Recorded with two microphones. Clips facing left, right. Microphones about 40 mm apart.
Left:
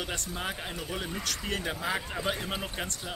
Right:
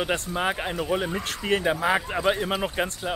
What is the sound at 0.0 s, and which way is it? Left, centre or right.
Speech, right.